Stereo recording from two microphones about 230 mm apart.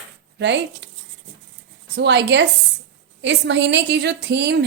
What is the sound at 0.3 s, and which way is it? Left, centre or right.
Speech, right.